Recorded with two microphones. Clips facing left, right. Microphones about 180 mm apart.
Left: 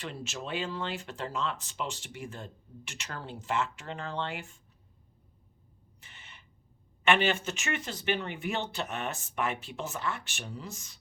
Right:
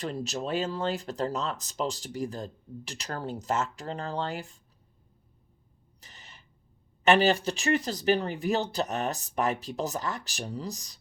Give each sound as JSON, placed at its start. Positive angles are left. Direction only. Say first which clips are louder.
{"t": 0.0, "sound": "speech", "louder": "right 6 dB", "side_deg": -40}
{"t": 6.0, "sound": "owl", "louder": "right 2 dB", "side_deg": -40}
{"t": 7.0, "sound": "speech", "louder": "right 5 dB", "side_deg": -40}